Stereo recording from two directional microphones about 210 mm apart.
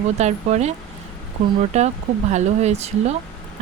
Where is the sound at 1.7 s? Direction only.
30° right (ahead or behind).